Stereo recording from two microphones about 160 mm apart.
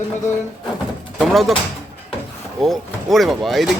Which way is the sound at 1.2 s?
Centre (ahead or behind).